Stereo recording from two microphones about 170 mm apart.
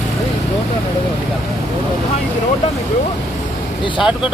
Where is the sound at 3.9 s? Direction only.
5° right (ahead or behind).